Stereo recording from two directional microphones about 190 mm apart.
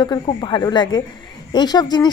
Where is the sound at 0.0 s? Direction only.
25° left (ahead or behind).